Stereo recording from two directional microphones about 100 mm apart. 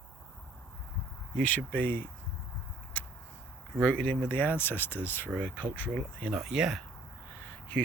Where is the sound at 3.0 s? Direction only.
15° left (ahead or behind).